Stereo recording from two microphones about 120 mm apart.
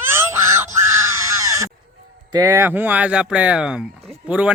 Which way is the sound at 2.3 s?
30° right (ahead or behind).